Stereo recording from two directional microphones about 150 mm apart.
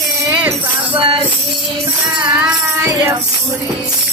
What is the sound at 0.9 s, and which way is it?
Speech, 35° right (ahead or behind).